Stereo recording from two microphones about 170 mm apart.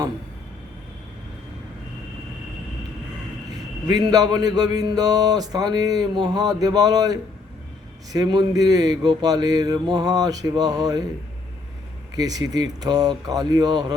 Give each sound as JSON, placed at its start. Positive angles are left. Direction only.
{"t": 3.8, "sound": "speech", "side_deg": -20}
{"t": 12.1, "sound": "speech", "side_deg": -20}